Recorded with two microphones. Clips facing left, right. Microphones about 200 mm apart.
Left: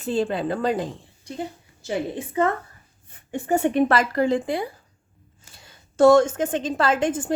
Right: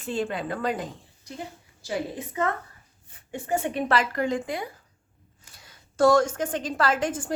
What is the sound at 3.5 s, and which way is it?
Speech, 50° left (ahead or behind).